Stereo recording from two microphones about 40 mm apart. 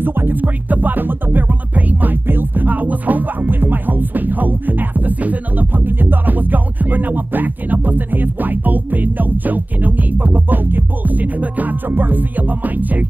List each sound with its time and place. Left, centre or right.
0.0 s music: right
5.9 s music: right